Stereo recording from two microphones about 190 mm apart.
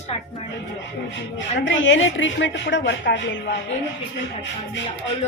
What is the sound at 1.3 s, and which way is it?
A woman's voice, 75° left (ahead or behind).